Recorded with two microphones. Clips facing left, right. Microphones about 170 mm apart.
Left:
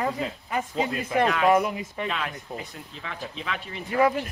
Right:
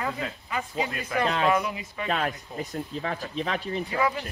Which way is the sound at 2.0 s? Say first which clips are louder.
Right 7 dB; 45° right (ahead or behind).